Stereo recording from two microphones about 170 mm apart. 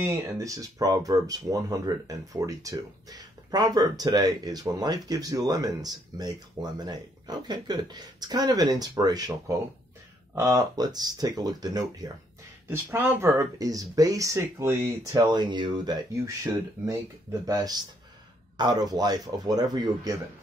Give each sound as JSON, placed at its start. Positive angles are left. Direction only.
{"t": 0.0, "sound": "speech", "side_deg": -15}